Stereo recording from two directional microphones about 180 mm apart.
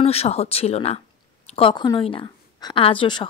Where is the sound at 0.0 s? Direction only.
35° left (ahead or behind).